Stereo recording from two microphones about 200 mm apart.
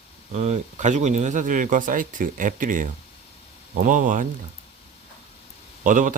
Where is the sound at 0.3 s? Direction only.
35° right (ahead or behind).